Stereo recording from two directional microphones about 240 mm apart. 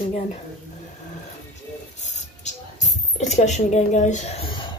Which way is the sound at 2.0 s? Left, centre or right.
Left.